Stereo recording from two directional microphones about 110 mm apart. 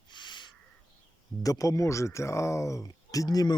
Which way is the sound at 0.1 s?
45° left (ahead or behind).